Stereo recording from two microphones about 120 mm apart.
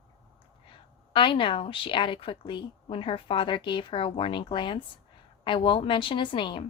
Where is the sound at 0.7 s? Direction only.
45° left (ahead or behind).